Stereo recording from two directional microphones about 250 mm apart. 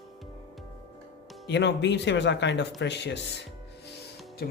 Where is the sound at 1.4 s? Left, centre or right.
Left.